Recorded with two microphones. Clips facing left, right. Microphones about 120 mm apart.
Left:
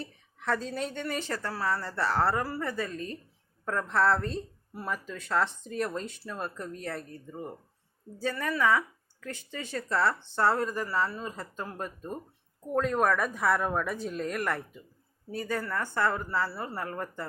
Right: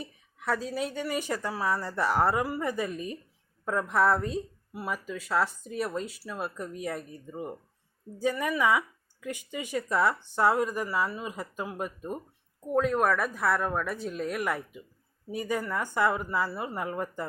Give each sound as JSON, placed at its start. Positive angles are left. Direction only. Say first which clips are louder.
{"t": 0.0, "sound": "a woman's voice", "louder": "even", "side_deg": -10}